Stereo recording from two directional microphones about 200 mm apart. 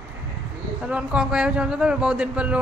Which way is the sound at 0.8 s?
5° right (ahead or behind).